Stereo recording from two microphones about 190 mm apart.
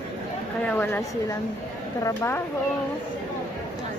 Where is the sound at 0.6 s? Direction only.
10° left (ahead or behind).